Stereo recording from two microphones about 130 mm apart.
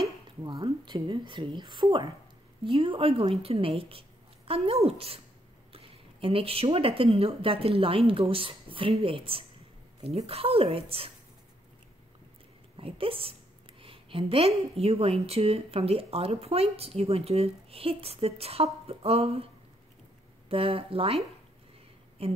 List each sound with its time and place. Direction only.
0.4 s a woman's voice: 35° right (ahead or behind)
6.2 s a woman's voice: 45° right (ahead or behind)
12.7 s a woman's voice: 45° right (ahead or behind)
22.2 s a woman's voice: 50° right (ahead or behind)